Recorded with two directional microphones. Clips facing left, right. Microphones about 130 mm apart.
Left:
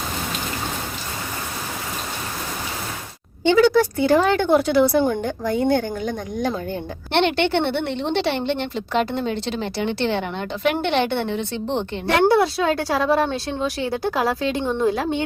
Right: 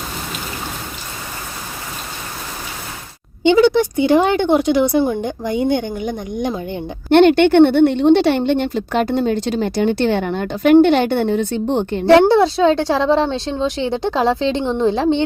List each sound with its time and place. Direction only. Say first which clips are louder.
3.4 s speech: right 3 dB; 20° right (ahead or behind)
7.1 s a woman's voice: right 9 dB; 50° right (ahead or behind)
12.3 s a woman's voice: right 5 dB; 25° right (ahead or behind)